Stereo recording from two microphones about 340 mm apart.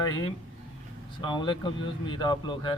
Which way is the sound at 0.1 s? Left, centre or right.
Centre.